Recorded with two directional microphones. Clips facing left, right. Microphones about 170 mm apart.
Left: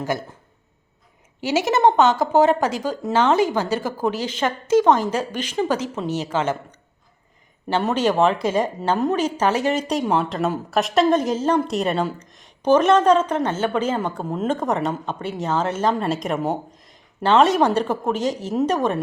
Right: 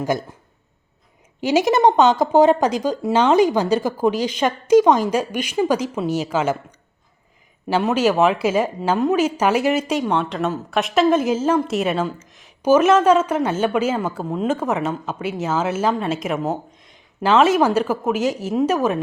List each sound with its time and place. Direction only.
1.4 s speech: 15° right (ahead or behind)